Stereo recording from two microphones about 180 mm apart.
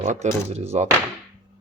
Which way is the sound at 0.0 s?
40° right (ahead or behind).